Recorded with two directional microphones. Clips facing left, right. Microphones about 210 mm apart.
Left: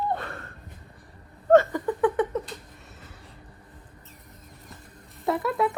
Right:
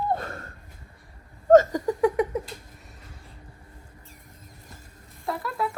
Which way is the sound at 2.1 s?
10° right (ahead or behind).